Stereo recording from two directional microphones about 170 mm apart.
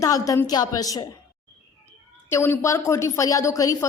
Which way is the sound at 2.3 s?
15° left (ahead or behind).